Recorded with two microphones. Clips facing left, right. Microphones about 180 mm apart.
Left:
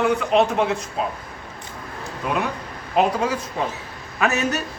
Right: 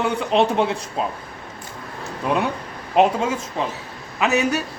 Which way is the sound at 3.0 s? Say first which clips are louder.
Right 2 dB; 25° right (ahead or behind).